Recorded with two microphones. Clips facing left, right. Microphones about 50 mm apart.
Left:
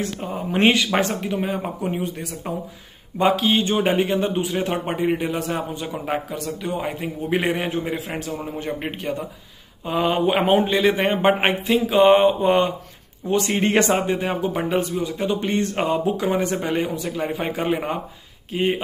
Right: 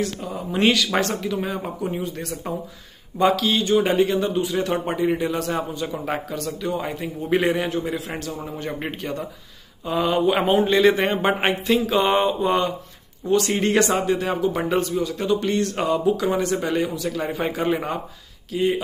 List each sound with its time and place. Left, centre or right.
0.0 s a man's voice: left
2.4 s a man's voice: left
7.5 s a man's voice: left; by 9.2 s centre
9.8 s a man's voice: left
10.7 s speech: centre
11.1 s a man's voice: centre
14.5 s a man's voice: centre
18.5 s speech: left